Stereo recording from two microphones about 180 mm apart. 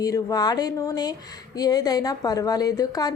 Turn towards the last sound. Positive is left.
turn(degrees=20)  # may be behind; listen again after turning